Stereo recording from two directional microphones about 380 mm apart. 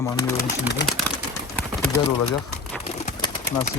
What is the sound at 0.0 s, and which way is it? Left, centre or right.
Speech, centre.